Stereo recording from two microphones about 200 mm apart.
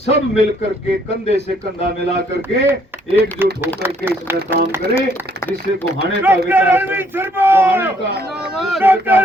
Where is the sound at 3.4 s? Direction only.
10° right (ahead or behind).